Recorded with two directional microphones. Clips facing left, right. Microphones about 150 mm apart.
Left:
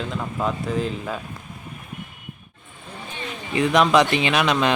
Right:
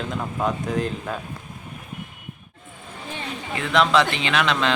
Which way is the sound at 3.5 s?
15° left (ahead or behind).